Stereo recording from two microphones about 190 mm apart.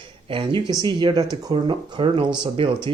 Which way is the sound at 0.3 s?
25° right (ahead or behind).